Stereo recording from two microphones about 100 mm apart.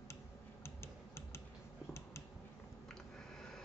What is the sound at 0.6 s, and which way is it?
Typing, 25° left (ahead or behind).